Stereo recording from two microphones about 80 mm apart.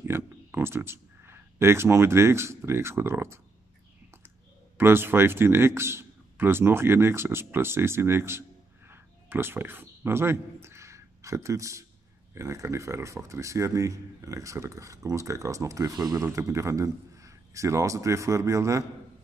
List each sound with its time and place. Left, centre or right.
0.0 s speech: right
4.7 s a man's voice: right
16.2 s a man's voice: right